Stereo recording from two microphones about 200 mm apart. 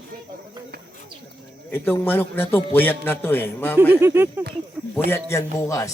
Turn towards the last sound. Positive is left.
turn(degrees=15)  # may be behind; listen again after turning